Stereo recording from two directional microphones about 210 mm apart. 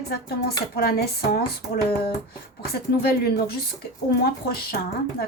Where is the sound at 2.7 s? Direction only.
50° left (ahead or behind).